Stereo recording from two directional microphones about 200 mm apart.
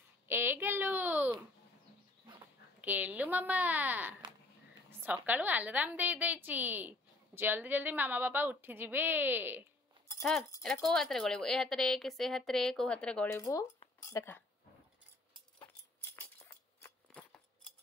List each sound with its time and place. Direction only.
0.3 s a sound: 10° right (ahead or behind)
2.8 s a woman's voice: 10° right (ahead or behind)
10.6 s a woman's voice: centre (ahead or behind)
13.4 s speech: 15° left (ahead or behind)
16.8 s scissors: 5° left (ahead or behind)